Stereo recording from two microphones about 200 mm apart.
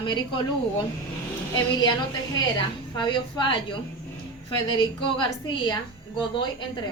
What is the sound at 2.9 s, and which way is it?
Speech, 25° left (ahead or behind).